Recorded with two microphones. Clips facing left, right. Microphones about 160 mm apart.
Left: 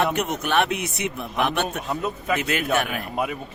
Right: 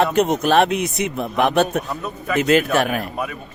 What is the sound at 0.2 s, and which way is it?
Speech, 35° right (ahead or behind).